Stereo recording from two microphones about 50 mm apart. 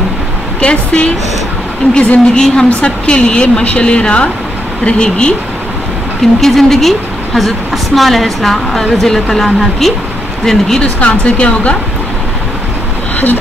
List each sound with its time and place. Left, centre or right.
0.6 s a woman's voice: left
6.4 s a woman's voice: centre
10.8 s a woman's voice: left